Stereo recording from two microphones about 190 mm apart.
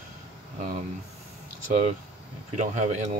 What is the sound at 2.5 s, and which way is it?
Speech, 40° right (ahead or behind).